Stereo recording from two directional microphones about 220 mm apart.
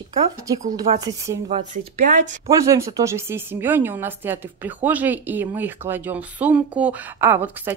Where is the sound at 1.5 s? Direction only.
30° right (ahead or behind).